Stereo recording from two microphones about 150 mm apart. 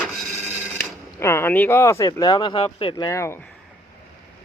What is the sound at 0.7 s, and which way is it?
Speech, 15° left (ahead or behind).